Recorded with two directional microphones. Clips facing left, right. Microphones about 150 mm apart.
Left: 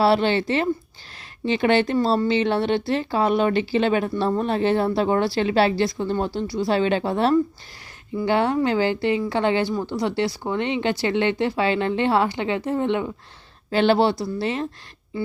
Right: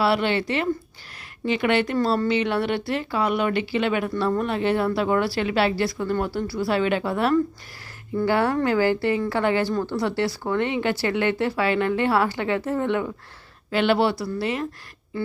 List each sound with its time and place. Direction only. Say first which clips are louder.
0.0 s speech: left 3 dB; 30° left (ahead or behind)